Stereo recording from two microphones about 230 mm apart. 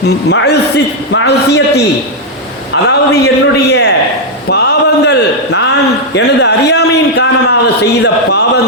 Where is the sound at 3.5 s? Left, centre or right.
Left.